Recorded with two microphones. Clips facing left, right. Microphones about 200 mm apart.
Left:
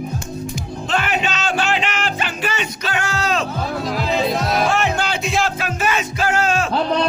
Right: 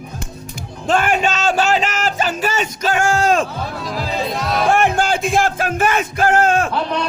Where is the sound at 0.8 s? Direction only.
45° right (ahead or behind).